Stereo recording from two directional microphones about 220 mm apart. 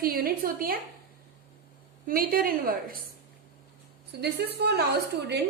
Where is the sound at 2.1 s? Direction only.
40° right (ahead or behind).